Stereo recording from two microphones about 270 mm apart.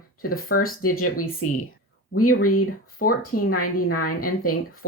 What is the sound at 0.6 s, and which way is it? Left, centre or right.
Speech, left.